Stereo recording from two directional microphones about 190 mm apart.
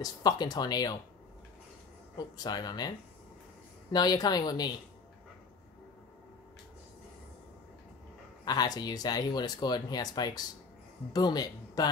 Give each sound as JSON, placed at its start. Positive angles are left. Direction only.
{"t": 0.0, "sound": "speech", "side_deg": 20}
{"t": 2.1, "sound": "speech", "side_deg": 20}
{"t": 3.9, "sound": "speech", "side_deg": 20}
{"t": 8.5, "sound": "speech", "side_deg": 20}